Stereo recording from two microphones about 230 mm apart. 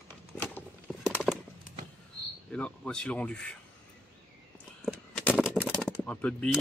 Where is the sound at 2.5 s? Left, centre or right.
Centre.